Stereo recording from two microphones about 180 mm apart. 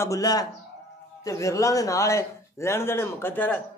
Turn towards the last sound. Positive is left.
turn(degrees=10)  # may be behind; listen again after turning